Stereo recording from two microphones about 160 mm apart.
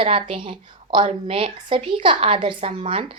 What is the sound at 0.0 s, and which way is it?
A woman's voice, 35° right (ahead or behind).